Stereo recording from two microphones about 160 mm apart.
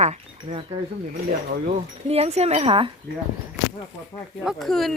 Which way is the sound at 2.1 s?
40° right (ahead or behind).